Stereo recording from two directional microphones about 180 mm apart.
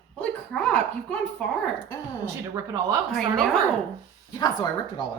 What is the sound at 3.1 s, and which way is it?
Speech, centre (ahead or behind).